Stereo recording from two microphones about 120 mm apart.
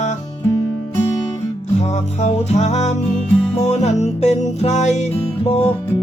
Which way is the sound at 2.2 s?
65° left (ahead or behind).